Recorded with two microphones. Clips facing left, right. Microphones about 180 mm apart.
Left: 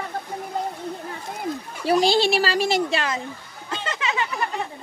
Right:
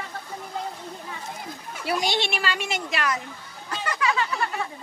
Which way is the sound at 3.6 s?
25° left (ahead or behind).